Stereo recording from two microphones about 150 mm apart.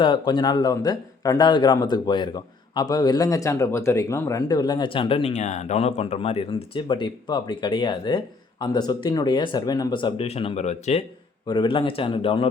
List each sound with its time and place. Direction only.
0.0 s a man's voice: 30° left (ahead or behind)
5.3 s speech: 50° left (ahead or behind)
11.4 s speech: 30° left (ahead or behind)